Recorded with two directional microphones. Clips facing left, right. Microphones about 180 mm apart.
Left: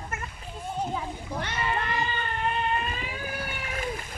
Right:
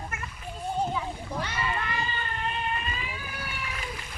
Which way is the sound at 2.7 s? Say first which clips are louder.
Left 4 dB; 50° left (ahead or behind).